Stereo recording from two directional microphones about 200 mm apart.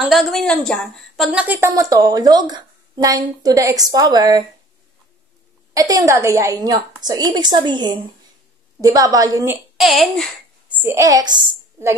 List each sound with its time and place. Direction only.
0.0 s a woman's voice: centre (ahead or behind); by 4.5 s 20° right (ahead or behind)
5.8 s a woman's voice: 15° right (ahead or behind)
9.8 s a child's voice: centre (ahead or behind)
10.8 s a woman's voice: 15° right (ahead or behind)